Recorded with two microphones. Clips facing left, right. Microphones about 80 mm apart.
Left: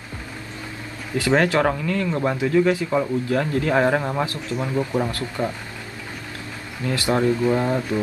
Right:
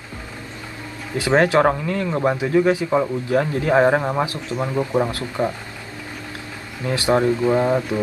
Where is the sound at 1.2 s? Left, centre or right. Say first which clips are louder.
Right 3 dB; right.